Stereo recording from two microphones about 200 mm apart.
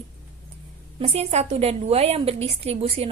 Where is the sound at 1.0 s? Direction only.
30° right (ahead or behind).